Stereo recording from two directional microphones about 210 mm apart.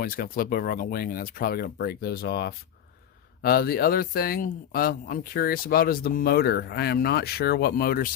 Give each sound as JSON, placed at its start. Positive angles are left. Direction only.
{"t": 0.0, "sound": "speech", "side_deg": 45}